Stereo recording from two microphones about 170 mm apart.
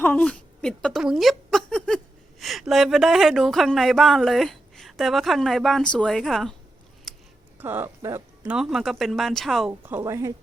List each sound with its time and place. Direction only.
0.0 s a sound: 10° left (ahead or behind)
2.4 s speech: centre (ahead or behind)
7.1 s a sound: centre (ahead or behind)
7.6 s speech: 10° right (ahead or behind)
8.5 s speech: centre (ahead or behind)
9.8 s speech: 15° right (ahead or behind)